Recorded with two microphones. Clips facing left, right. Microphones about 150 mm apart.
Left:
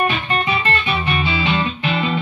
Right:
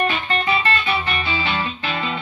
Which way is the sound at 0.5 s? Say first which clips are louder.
Even; 15° left (ahead or behind).